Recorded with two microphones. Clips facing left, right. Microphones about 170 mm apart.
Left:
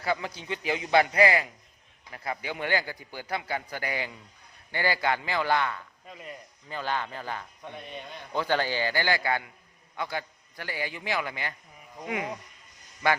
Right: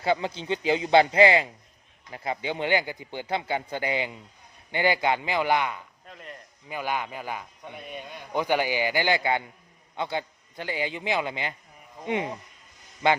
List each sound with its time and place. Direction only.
0.0 s a man's voice: 25° right (ahead or behind)
6.1 s speech: 5° left (ahead or behind)
6.7 s a man's voice: 10° right (ahead or behind)